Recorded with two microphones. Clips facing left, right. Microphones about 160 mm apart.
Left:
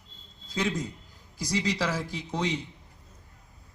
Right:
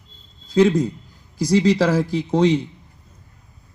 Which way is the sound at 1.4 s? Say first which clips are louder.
Right 13 dB; 30° right (ahead or behind).